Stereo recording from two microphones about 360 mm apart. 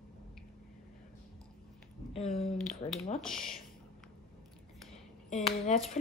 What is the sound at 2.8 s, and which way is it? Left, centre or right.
Speech, centre.